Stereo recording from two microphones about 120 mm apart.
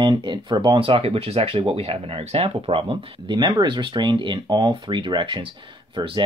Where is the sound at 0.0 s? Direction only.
40° right (ahead or behind).